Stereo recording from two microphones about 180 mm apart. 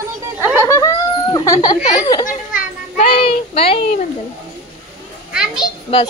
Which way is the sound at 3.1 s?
30° left (ahead or behind).